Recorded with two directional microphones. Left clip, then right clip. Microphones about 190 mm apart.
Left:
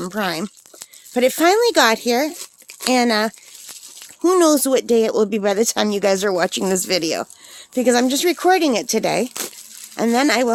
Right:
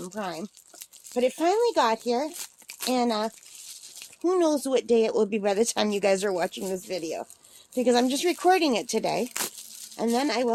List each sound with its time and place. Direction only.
0.0 s speech: 55° left (ahead or behind); by 6.5 s 25° left (ahead or behind)
6.5 s speech: 55° left (ahead or behind)
7.8 s speech: 30° left (ahead or behind)